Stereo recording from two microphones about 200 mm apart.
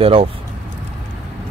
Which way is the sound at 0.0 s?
30° right (ahead or behind).